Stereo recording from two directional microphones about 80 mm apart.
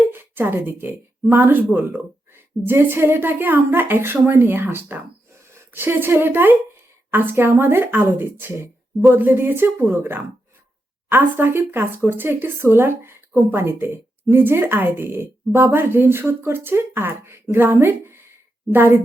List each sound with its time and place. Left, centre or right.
0.1 s speech: right